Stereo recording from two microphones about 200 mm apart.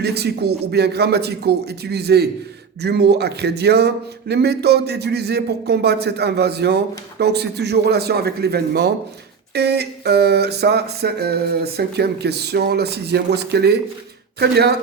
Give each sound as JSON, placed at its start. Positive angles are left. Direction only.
{"t": 0.0, "sound": "speech", "side_deg": -55}
{"t": 9.6, "sound": "a sound", "side_deg": -55}
{"t": 14.3, "sound": "speech", "side_deg": -55}